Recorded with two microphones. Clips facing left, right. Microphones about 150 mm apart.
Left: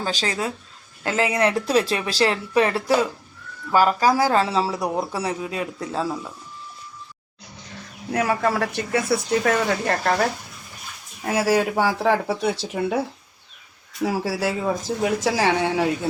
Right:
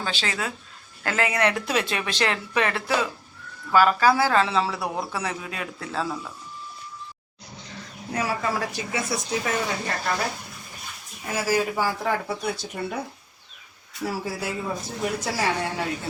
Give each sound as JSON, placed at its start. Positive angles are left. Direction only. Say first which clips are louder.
{"t": 0.0, "sound": "a woman's voice", "louder": "left 4 dB", "side_deg": 40}
{"t": 5.8, "sound": "speech", "louder": "even", "side_deg": 15}
{"t": 8.1, "sound": "speech", "louder": "left 5 dB", "side_deg": 60}
{"t": 11.3, "sound": "speech", "louder": "left 4 dB", "side_deg": 65}
{"t": 14.0, "sound": "speech", "louder": "left 6 dB", "side_deg": 80}